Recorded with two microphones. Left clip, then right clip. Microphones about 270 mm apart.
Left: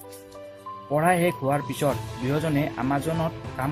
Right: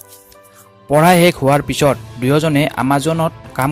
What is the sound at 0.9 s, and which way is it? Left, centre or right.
Speech, right.